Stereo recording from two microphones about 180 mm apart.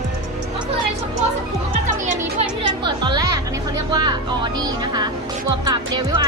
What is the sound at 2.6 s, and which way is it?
Music, 25° right (ahead or behind).